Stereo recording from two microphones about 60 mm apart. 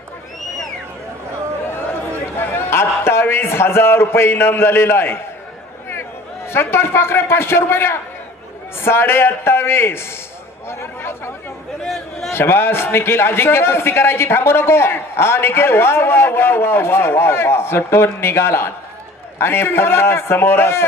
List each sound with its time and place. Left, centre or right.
2.3 s a man's voice: left
6.5 s a man's voice: left